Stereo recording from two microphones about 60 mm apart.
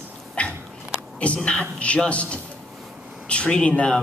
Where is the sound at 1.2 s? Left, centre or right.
Centre.